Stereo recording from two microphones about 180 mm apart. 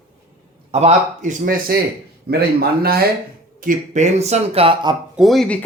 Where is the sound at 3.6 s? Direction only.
45° right (ahead or behind); by 4.9 s 25° right (ahead or behind).